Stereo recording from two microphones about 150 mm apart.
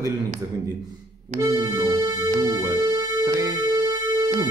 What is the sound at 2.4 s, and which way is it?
Music, 20° right (ahead or behind).